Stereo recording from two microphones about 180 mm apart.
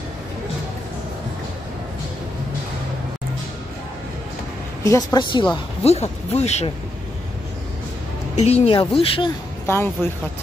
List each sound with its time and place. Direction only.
4.8 s speech: 20° left (ahead or behind); by 6.7 s 35° left (ahead or behind)
8.4 s speech: 35° left (ahead or behind)
9.7 s speech: 15° left (ahead or behind)